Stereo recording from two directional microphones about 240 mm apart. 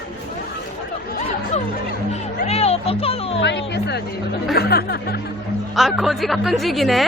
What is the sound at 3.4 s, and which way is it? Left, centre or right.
Speech, left.